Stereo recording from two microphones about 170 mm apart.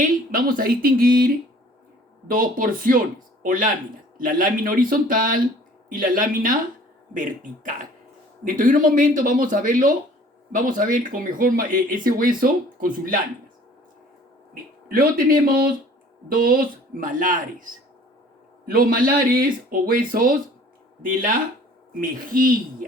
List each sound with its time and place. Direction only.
0.0 s speech: 60° right (ahead or behind)
2.3 s speech: 55° right (ahead or behind)
14.5 s speech: 60° right (ahead or behind)
21.9 s speech: 55° right (ahead or behind)